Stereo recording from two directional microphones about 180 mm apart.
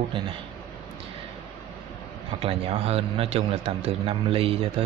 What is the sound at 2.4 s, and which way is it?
A man's voice, 35° right (ahead or behind).